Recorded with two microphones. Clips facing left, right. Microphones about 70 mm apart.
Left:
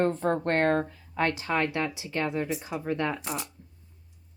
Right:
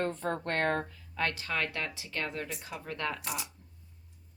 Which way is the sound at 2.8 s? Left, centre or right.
Centre.